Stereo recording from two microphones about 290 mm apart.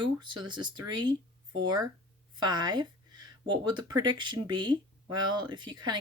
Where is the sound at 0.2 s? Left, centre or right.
Centre.